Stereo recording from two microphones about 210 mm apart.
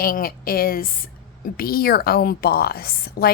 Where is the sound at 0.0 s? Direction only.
45° left (ahead or behind).